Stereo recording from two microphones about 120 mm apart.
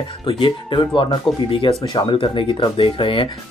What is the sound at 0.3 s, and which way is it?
Speech, 45° left (ahead or behind).